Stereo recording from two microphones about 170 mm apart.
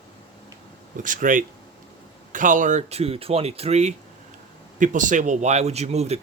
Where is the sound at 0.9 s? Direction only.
50° right (ahead or behind).